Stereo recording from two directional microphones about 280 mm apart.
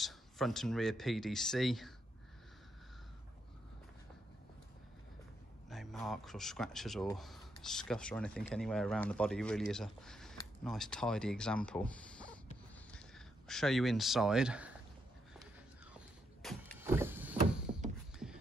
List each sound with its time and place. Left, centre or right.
0.0 s speech: centre
5.7 s speech: centre
13.5 s speech: centre
16.4 s vehicle: centre
17.7 s a sound: right